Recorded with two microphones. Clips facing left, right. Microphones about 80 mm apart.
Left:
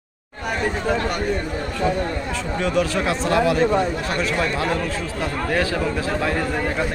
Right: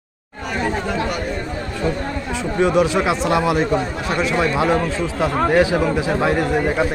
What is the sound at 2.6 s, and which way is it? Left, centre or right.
A man's voice, centre.